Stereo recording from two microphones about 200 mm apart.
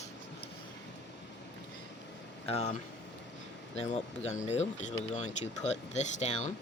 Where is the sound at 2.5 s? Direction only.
35° left (ahead or behind).